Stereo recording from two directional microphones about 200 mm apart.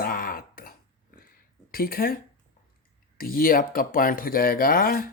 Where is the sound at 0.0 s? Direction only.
45° left (ahead or behind).